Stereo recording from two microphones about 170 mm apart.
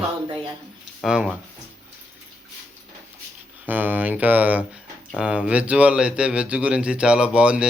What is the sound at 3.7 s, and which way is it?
Speech, 10° right (ahead or behind).